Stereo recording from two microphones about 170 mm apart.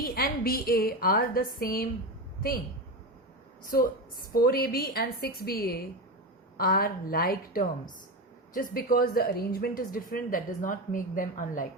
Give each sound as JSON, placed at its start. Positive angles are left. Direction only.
{"t": 0.0, "sound": "a woman's voice", "side_deg": 60}
{"t": 3.6, "sound": "a woman's voice", "side_deg": 55}